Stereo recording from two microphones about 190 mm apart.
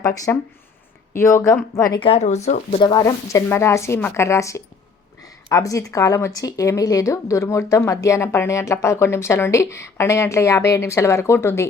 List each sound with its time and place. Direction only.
0.0 s speech: 20° left (ahead or behind); by 2.8 s 35° left (ahead or behind)
2.8 s speech: 20° left (ahead or behind)